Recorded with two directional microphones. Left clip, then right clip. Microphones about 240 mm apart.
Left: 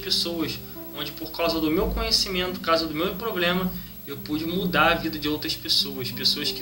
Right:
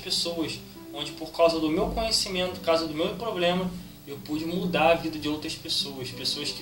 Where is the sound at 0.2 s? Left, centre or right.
Right.